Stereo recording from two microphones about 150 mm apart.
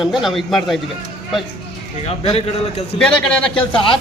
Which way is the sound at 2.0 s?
40° left (ahead or behind).